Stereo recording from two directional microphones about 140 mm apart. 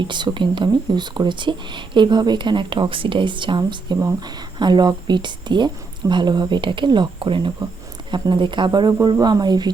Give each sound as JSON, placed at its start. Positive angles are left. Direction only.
{"t": 0.0, "sound": "speech", "side_deg": -35}